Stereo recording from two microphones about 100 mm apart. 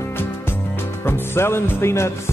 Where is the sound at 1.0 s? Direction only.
25° left (ahead or behind).